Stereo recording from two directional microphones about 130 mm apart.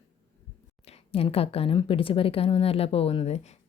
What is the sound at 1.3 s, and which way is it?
Speech, 50° left (ahead or behind).